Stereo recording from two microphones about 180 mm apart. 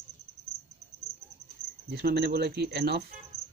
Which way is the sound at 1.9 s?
60° right (ahead or behind).